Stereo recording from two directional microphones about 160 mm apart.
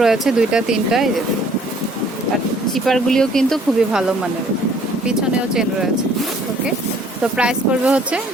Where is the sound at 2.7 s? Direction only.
Centre (ahead or behind).